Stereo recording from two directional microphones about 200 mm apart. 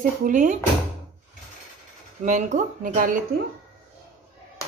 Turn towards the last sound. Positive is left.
turn(degrees=-40)  # may be behind; listen again after turning